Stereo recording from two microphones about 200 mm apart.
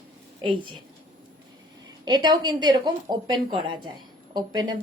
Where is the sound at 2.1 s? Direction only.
20° right (ahead or behind).